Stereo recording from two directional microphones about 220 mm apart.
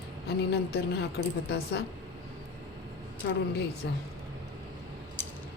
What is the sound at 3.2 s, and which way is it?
Speech, 55° left (ahead or behind).